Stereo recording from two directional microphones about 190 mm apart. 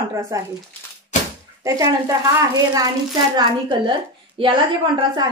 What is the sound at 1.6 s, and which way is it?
Speech, 20° right (ahead or behind).